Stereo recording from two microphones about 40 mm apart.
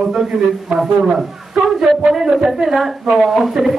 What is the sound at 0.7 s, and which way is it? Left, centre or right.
Speech, right.